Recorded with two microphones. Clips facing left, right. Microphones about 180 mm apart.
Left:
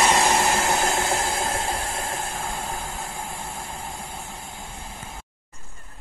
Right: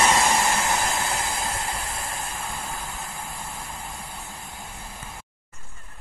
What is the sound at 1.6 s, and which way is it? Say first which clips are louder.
Train: left 4 dB; 90° left.